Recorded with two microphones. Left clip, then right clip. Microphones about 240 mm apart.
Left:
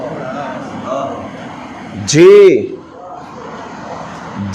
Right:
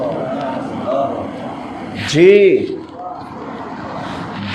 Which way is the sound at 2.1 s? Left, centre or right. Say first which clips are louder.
Left 4 dB; left.